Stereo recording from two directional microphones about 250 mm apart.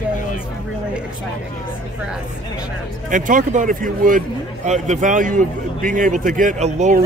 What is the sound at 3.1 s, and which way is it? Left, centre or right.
Speech, right.